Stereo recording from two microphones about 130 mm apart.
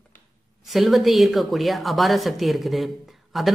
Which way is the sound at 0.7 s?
Centre (ahead or behind).